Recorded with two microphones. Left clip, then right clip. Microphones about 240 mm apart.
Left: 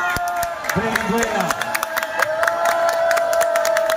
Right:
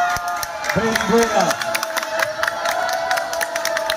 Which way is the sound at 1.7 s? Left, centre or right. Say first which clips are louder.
Even; left.